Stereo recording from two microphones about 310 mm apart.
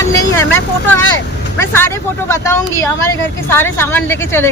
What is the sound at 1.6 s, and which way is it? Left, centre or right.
Speech, centre.